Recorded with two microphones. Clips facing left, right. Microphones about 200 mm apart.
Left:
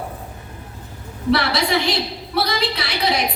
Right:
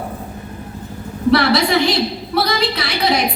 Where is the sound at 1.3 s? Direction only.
40° right (ahead or behind).